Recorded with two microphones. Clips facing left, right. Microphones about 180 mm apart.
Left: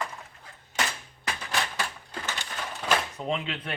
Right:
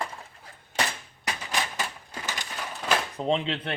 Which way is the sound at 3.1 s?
30° right (ahead or behind).